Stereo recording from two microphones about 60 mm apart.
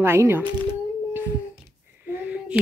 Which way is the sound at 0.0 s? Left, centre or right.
Right.